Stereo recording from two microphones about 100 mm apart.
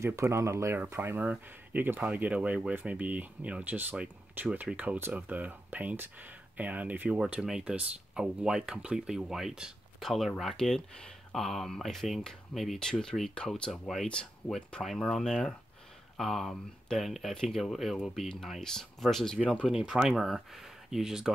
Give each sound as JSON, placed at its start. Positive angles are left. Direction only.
{"t": 0.0, "sound": "speech", "side_deg": -30}
{"t": 19.6, "sound": "speech", "side_deg": -10}